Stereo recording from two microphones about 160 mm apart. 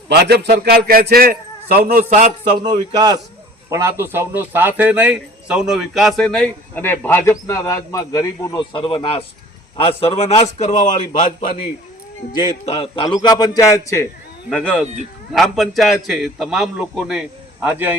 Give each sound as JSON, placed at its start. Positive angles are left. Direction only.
{"t": 0.1, "sound": "a man's voice", "side_deg": -90}
{"t": 2.0, "sound": "a sound", "side_deg": -45}
{"t": 2.6, "sound": "a man's voice", "side_deg": -25}
{"t": 8.7, "sound": "a man's voice", "side_deg": 30}
{"t": 12.6, "sound": "a man's voice", "side_deg": 35}
{"t": 14.5, "sound": "a man's voice", "side_deg": 5}